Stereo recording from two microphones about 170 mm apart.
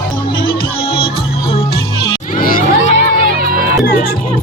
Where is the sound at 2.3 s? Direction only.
50° left (ahead or behind).